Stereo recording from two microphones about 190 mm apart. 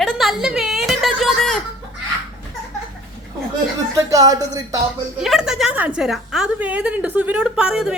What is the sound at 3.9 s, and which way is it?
Speech, 20° right (ahead or behind).